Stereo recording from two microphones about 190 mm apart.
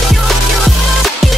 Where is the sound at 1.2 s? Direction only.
Centre (ahead or behind).